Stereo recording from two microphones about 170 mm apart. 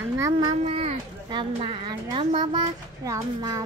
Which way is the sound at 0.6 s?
35° right (ahead or behind).